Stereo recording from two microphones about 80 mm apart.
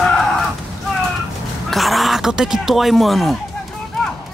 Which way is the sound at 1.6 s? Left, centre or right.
Centre.